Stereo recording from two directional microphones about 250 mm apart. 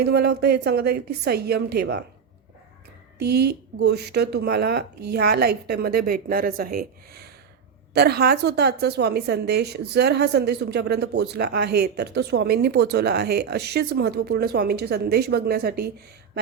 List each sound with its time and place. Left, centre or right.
0.0 s a woman's voice: right
3.2 s a woman's voice: right